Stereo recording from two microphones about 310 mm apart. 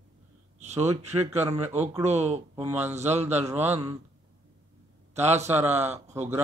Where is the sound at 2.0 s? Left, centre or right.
Right.